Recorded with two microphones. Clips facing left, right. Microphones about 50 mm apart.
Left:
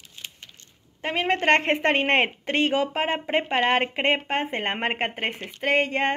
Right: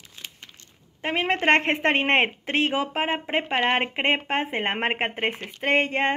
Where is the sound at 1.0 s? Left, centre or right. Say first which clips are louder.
Even; right.